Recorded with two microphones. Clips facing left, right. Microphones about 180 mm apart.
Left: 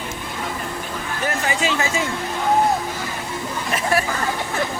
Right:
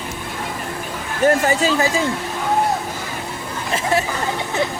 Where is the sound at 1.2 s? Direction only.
40° right (ahead or behind).